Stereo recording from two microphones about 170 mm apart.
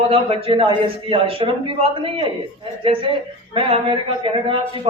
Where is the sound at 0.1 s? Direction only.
35° right (ahead or behind).